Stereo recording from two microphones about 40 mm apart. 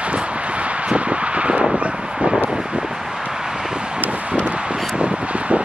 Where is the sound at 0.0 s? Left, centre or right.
Right.